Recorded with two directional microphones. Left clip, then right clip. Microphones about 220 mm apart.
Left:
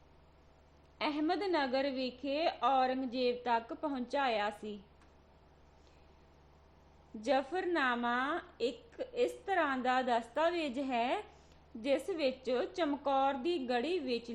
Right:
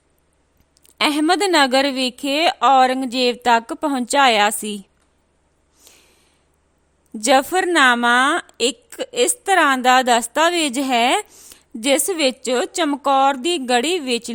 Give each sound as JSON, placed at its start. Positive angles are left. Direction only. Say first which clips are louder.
{"t": 0.9, "sound": "a woman's voice", "louder": "right 17 dB", "side_deg": -55}
{"t": 7.2, "sound": "a woman's voice", "louder": "right 17 dB", "side_deg": -50}